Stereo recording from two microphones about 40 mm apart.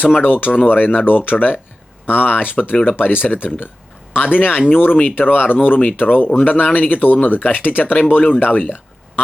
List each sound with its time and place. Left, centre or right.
0.2 s speech: left